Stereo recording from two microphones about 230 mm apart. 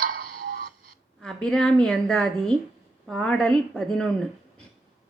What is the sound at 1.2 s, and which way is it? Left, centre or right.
A woman's voice, centre.